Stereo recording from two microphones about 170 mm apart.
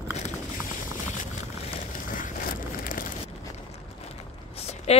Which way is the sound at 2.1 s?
55° left (ahead or behind).